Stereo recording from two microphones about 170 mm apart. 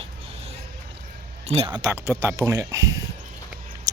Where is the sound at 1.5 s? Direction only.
35° right (ahead or behind).